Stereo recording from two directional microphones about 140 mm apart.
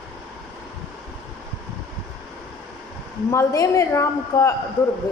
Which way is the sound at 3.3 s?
20° left (ahead or behind).